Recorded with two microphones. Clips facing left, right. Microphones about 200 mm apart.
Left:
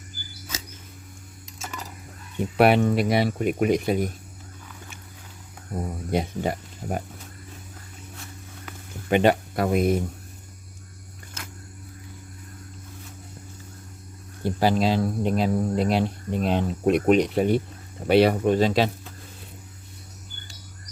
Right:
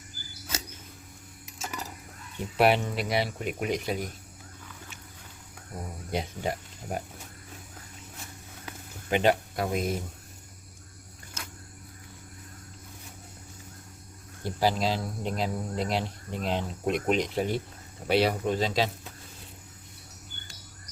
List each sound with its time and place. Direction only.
2.6 s speech: 60° left (ahead or behind)
6.1 s speech: 55° left (ahead or behind)
9.0 s speech: 60° left (ahead or behind)
14.4 s speech: 60° left (ahead or behind)